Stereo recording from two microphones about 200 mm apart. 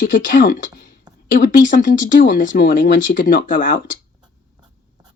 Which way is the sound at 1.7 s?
40° left (ahead or behind).